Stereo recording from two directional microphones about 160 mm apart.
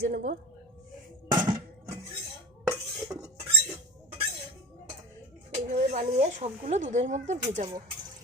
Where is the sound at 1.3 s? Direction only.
30° right (ahead or behind).